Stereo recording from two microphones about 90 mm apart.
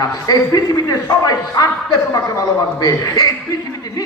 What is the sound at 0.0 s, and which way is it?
A man's voice, 45° left (ahead or behind).